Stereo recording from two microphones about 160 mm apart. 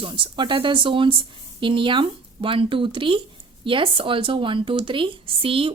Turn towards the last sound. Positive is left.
turn(degrees=-35)  # may be behind; listen again after turning